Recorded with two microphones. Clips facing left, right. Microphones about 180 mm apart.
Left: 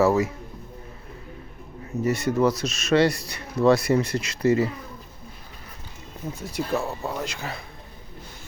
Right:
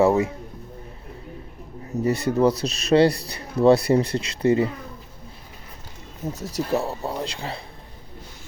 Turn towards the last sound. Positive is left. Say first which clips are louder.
# right 2 dB
turn(degrees=-30)  # may be behind; listen again after turning